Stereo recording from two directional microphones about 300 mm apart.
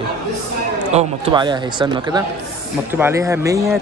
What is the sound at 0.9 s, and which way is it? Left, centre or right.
Speech, centre.